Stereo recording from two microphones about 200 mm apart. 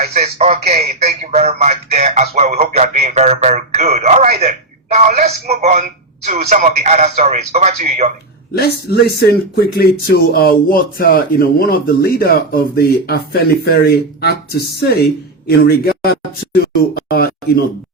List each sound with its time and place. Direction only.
0.0 s speech: 30° right (ahead or behind)
8.5 s speech: 50° left (ahead or behind)
16.9 s a sound: 50° left (ahead or behind)